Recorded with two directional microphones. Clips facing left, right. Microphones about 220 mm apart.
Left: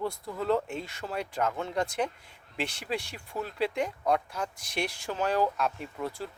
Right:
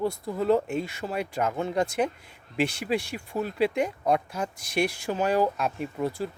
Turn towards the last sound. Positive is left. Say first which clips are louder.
# right 6 dB
turn(degrees=-15)  # may be behind; listen again after turning